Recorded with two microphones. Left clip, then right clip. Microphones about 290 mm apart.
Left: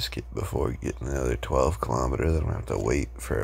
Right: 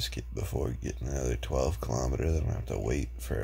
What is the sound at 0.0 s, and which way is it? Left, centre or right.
Speech, centre.